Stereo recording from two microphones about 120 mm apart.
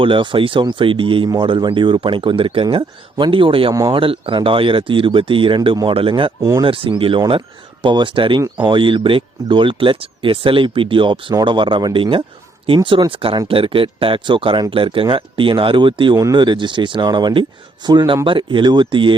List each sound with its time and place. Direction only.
0.0 s speech: 45° right (ahead or behind)
6.4 s speech: 25° right (ahead or behind)
6.7 s speech: 50° right (ahead or behind)
16.1 s speech: 30° right (ahead or behind)
16.4 s speech: 40° right (ahead or behind)